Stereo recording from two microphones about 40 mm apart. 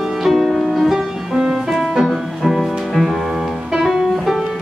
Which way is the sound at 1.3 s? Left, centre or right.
Centre.